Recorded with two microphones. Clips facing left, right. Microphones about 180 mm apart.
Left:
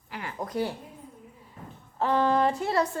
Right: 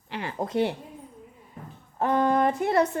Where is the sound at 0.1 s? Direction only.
25° right (ahead or behind).